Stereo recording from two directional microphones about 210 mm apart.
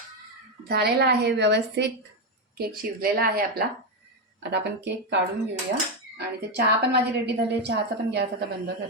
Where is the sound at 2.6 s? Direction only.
45° right (ahead or behind).